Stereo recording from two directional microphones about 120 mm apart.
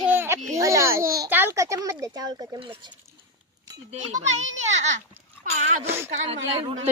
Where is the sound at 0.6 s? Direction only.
25° right (ahead or behind).